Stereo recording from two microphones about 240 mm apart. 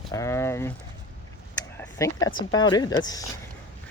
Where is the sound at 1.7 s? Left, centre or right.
Centre.